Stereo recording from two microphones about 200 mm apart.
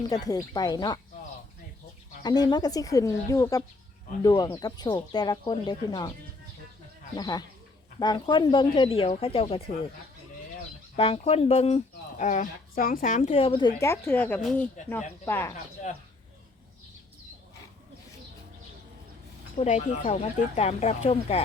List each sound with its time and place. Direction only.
0.1 s speech: 20° left (ahead or behind)
2.2 s speech: 20° left (ahead or behind)
7.2 s speech: 20° left (ahead or behind)
10.9 s speech: 30° left (ahead or behind); by 15.5 s 10° left (ahead or behind)
19.5 s speech: 35° left (ahead or behind)